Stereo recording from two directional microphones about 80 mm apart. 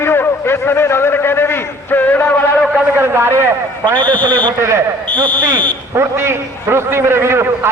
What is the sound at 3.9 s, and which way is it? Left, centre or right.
Speech, right.